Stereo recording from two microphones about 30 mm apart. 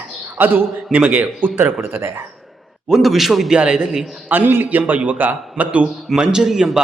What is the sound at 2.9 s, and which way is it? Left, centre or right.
Speech, centre.